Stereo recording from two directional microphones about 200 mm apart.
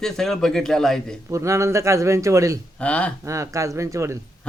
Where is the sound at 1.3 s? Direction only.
15° right (ahead or behind).